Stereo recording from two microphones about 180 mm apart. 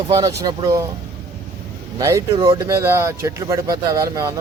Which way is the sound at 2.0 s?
15° right (ahead or behind).